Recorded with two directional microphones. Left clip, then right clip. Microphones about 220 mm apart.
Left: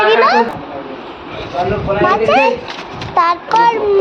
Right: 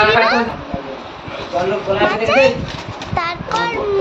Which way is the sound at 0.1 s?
15° left (ahead or behind).